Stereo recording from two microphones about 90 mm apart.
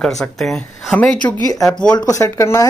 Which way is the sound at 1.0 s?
15° left (ahead or behind).